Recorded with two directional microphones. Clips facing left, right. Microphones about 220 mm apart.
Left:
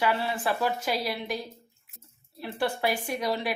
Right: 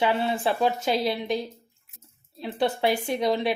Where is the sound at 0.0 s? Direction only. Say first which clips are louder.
Right 4 dB; 25° right (ahead or behind).